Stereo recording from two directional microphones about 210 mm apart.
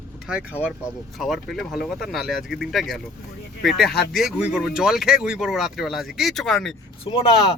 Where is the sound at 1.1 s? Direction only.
Centre (ahead or behind).